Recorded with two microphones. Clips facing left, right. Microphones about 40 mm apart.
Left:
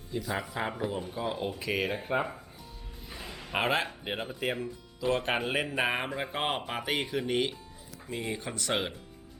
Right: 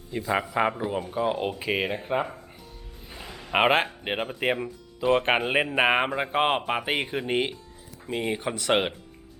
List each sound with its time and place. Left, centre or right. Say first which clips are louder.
0.1 s speech: right 7 dB; right
0.4 s speech: right 9 dB; right
0.7 s speech: right 4 dB; centre
3.5 s speech: right 7 dB; right
8.1 s speech: right 7 dB; right